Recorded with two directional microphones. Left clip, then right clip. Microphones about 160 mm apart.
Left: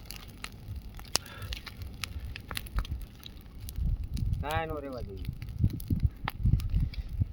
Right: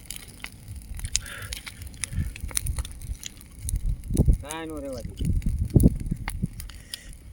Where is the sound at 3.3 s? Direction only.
20° right (ahead or behind).